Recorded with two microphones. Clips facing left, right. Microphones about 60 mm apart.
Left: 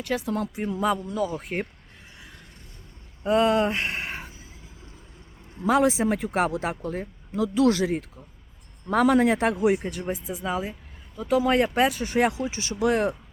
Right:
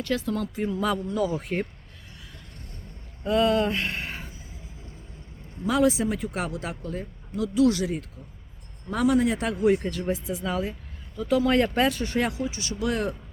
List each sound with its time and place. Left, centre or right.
0.0 s speech: centre
0.9 s speech: centre
3.2 s speech: left
5.6 s speech: left
8.9 s speech: left
9.7 s speech: centre
12.2 s speech: left